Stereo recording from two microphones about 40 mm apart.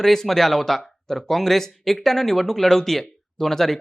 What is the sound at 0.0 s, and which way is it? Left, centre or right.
Speech, centre.